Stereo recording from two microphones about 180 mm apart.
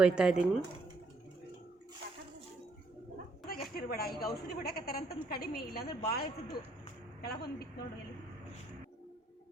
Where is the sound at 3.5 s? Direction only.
55° left (ahead or behind).